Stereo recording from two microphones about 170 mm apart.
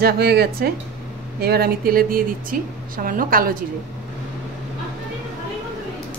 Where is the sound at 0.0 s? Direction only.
70° right (ahead or behind).